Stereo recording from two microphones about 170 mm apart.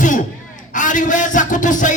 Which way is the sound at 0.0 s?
50° left (ahead or behind).